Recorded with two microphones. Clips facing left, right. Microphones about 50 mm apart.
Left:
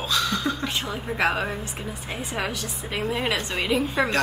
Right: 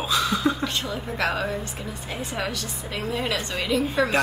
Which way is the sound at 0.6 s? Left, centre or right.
Centre.